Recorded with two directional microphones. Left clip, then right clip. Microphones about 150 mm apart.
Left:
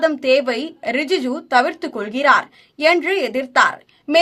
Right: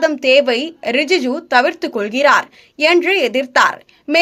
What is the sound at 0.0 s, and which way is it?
A woman's voice, 20° right (ahead or behind).